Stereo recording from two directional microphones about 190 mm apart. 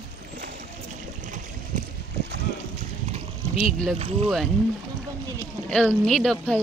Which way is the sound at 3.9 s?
30° right (ahead or behind).